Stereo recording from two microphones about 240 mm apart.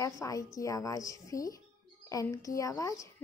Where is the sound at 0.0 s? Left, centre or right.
Centre.